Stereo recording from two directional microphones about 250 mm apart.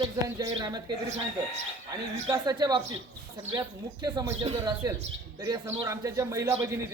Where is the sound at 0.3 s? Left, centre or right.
Centre.